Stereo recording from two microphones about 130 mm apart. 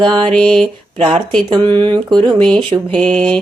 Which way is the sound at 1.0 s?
45° right (ahead or behind).